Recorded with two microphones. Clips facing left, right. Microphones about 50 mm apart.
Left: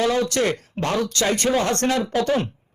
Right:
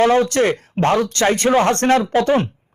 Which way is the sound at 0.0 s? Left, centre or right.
Right.